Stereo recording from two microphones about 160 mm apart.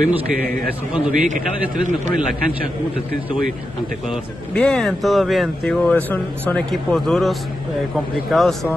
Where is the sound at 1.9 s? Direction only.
50° right (ahead or behind).